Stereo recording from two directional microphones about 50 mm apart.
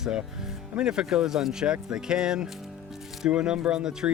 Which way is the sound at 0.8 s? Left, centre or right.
Centre.